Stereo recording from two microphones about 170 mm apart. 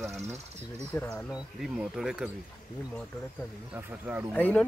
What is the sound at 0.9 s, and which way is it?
Speech, 10° left (ahead or behind).